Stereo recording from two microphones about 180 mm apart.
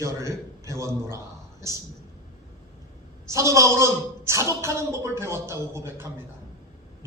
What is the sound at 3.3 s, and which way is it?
Speech, 15° right (ahead or behind).